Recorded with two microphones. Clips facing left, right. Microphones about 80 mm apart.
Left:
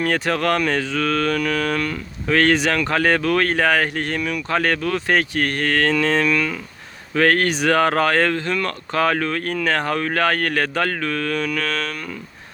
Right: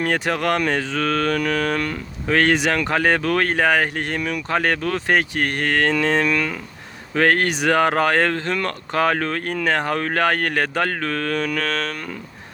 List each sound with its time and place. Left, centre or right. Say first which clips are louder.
0.0 s speech: left 1 dB; centre
10.0 s speech: even; right
11.0 s speech: even; right